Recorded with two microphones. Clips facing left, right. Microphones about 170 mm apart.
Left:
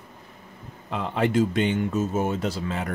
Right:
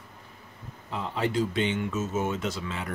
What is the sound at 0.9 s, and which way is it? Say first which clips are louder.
Speech: left 5 dB; 60° left (ahead or behind).